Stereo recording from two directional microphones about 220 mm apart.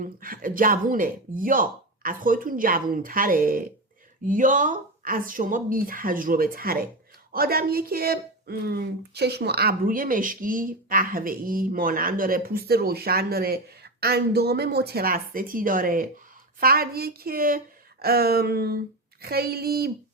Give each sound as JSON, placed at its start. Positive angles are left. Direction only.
{"t": 0.0, "sound": "speech", "side_deg": -40}